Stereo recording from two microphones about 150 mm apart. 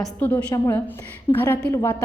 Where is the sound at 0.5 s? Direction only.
20° left (ahead or behind).